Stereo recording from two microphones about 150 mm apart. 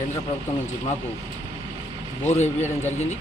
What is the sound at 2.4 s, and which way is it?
Speech, 50° left (ahead or behind).